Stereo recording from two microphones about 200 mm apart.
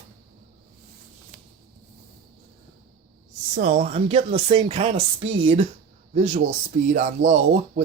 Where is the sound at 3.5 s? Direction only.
35° right (ahead or behind).